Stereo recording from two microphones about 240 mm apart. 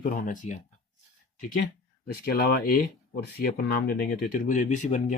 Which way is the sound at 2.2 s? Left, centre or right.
Left.